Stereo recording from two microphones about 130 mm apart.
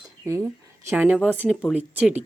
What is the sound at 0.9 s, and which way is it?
Speech, 15° right (ahead or behind).